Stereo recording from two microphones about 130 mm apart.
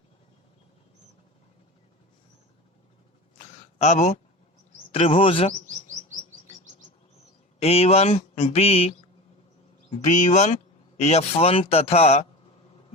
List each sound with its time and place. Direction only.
3.3 s a sound: 60° left (ahead or behind)
4.9 s speech: 50° left (ahead or behind)
7.6 s speech: 50° left (ahead or behind)
9.9 s speech: 65° left (ahead or behind)